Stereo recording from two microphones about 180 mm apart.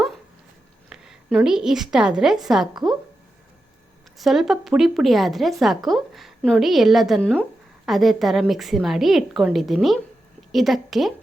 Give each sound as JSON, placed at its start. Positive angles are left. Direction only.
{"t": 0.9, "sound": "a woman's voice", "side_deg": -5}
{"t": 4.2, "sound": "a woman's voice", "side_deg": 0}